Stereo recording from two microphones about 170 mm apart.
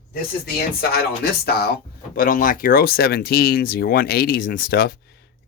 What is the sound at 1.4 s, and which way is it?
Speech, 70° left (ahead or behind).